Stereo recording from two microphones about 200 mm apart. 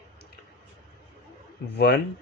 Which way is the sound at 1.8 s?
55° left (ahead or behind).